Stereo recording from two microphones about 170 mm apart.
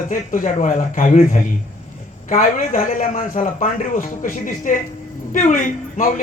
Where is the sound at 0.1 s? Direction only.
50° left (ahead or behind).